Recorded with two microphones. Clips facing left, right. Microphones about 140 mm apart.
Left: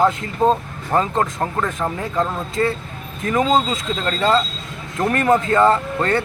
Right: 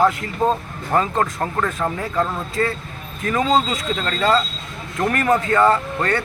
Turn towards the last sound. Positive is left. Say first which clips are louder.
# left 1 dB
turn(degrees=25)  # may be behind; listen again after turning